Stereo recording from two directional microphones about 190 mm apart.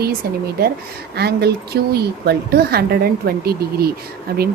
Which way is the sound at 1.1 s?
60° right (ahead or behind).